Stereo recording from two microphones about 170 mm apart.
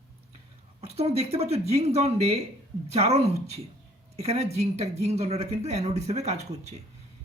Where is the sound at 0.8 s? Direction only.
35° right (ahead or behind).